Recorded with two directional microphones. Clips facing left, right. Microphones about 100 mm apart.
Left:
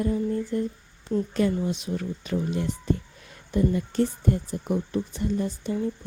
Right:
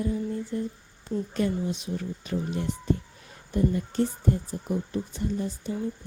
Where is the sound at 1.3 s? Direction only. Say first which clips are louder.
Left 1 dB; 90° left.